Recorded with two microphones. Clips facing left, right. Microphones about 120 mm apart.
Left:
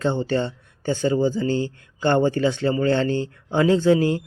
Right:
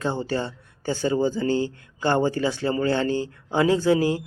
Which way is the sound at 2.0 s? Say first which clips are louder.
Left 3 dB; 35° right (ahead or behind).